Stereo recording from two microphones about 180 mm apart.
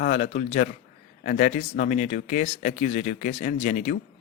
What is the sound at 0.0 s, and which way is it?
Speech, 45° left (ahead or behind).